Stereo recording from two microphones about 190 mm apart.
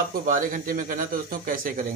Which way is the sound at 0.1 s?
45° right (ahead or behind).